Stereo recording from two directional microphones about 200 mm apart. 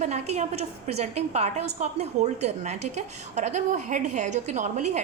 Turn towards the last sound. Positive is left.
turn(degrees=-35)  # may be behind; listen again after turning